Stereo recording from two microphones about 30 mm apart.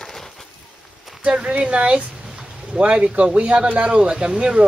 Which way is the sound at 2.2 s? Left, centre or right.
Right.